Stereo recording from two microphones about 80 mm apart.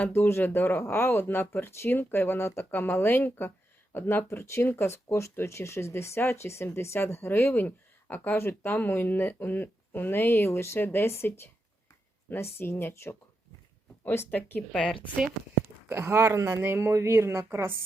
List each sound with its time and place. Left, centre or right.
0.1 s speech: left
12.4 s speech: left
15.9 s speech: right